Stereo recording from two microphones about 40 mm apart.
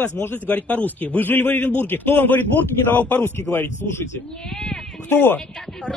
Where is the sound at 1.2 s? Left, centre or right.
Left.